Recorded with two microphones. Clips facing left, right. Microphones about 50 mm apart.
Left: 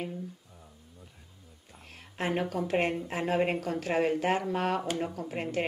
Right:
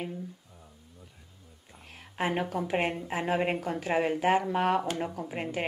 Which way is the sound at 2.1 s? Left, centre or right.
Centre.